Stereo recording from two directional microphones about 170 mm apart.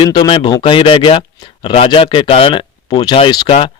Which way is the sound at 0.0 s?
25° left (ahead or behind).